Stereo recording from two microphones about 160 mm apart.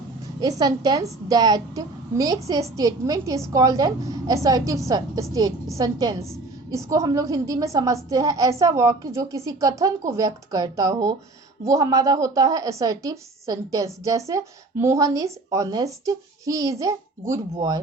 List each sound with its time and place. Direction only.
0.3 s a woman's voice: 25° right (ahead or behind)